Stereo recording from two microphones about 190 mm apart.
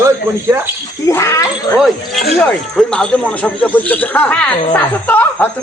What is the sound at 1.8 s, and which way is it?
Speech, centre (ahead or behind).